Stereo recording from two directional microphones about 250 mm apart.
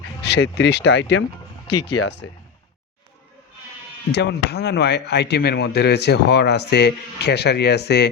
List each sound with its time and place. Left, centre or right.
0.2 s speech: left
1.6 s speech: left
4.1 s speech: left